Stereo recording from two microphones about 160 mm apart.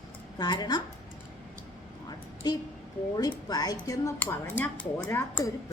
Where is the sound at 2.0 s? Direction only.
25° left (ahead or behind).